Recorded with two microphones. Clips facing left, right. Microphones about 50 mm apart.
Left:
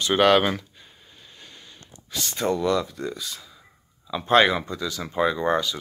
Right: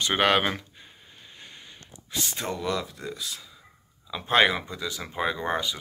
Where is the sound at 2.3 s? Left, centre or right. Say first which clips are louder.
Left 8 dB; centre.